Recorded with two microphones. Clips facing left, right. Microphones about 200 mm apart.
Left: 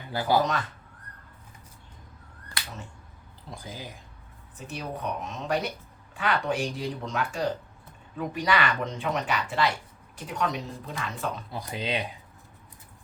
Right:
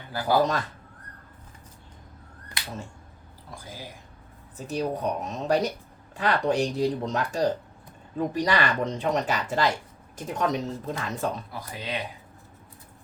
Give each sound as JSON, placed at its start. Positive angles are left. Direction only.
{"t": 0.1, "sound": "speech", "side_deg": 20}
{"t": 2.6, "sound": "finger snapping", "side_deg": -20}
{"t": 4.5, "sound": "a woman's voice", "side_deg": -40}
{"t": 11.5, "sound": "speech", "side_deg": 25}